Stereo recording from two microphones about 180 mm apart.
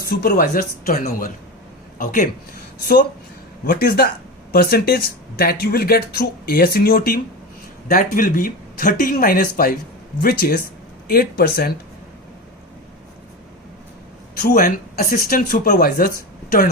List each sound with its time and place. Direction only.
0.0 s speech: 60° left (ahead or behind)
14.4 s speech: 55° left (ahead or behind)